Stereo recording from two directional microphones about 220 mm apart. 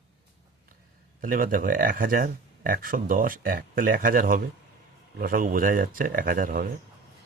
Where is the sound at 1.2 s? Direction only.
40° right (ahead or behind).